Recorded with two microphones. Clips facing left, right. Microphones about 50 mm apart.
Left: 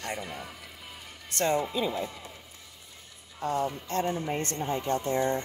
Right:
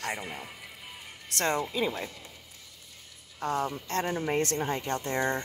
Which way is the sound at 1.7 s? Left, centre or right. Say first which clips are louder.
Left 1 dB; right.